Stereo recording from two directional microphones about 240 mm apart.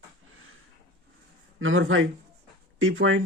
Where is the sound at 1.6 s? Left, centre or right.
Right.